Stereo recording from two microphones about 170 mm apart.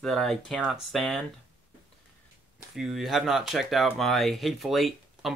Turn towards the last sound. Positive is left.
turn(degrees=0)  # may be behind; listen again after turning